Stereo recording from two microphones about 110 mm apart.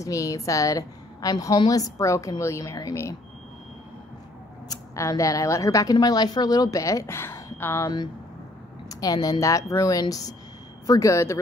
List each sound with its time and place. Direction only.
0.0 s a woman's voice: 30° left (ahead or behind)
4.6 s a woman's voice: 30° left (ahead or behind)
8.8 s a woman's voice: 35° left (ahead or behind)